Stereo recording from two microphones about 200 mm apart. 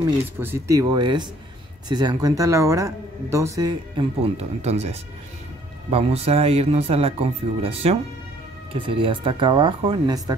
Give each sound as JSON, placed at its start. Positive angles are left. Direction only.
{"t": 0.0, "sound": "speech", "side_deg": -15}